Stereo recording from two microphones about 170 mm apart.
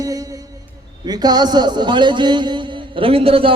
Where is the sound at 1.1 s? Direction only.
25° right (ahead or behind).